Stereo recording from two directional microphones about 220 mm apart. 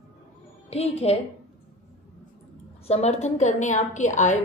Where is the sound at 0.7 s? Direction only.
30° left (ahead or behind).